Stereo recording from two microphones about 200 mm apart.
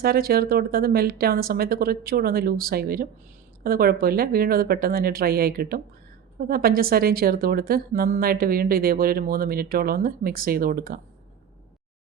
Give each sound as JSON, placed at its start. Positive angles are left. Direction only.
{"t": 0.0, "sound": "a woman's voice", "side_deg": -50}